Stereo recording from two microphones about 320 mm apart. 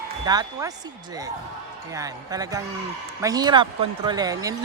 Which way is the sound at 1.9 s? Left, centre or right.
Centre.